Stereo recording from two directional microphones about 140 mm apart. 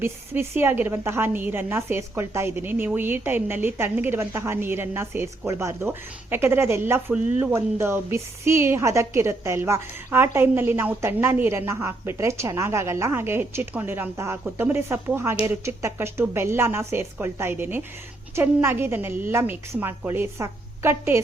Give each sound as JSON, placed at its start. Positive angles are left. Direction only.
{"t": 0.0, "sound": "a woman's voice", "side_deg": -15}